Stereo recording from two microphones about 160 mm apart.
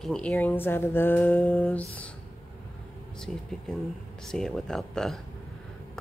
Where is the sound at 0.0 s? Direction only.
5° left (ahead or behind).